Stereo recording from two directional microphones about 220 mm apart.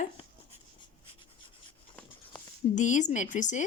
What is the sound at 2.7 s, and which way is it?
Speech, 35° left (ahead or behind).